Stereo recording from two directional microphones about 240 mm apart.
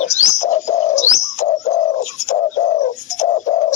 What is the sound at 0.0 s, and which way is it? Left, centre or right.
Bird, left.